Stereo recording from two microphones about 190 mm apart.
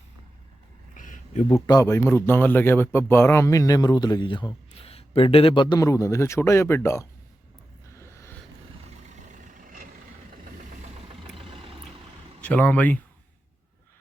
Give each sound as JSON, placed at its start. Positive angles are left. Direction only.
{"t": 0.9, "sound": "a sound", "side_deg": 45}
{"t": 1.6, "sound": "speech", "side_deg": 20}
{"t": 7.9, "sound": "vehicle", "side_deg": 15}
{"t": 9.0, "sound": "vehicle", "side_deg": -40}
{"t": 10.9, "sound": "vehicle", "side_deg": -30}
{"t": 12.4, "sound": "speech", "side_deg": 5}